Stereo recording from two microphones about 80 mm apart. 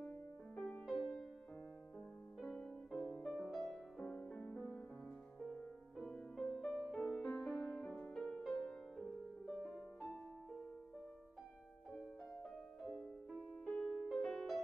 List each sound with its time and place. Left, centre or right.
0.6 s music: centre
0.8 s music: centre
2.4 s music: centre
12.4 s music: centre
14.1 s music: centre